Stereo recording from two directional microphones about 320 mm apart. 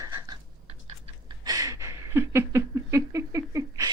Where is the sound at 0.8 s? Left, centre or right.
Centre.